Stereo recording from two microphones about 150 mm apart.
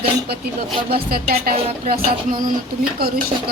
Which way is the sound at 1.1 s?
80° right.